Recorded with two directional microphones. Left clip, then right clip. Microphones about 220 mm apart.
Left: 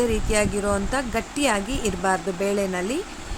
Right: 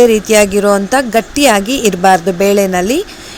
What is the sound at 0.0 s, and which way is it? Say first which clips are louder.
Speech: right 15 dB; 30° right (ahead or behind).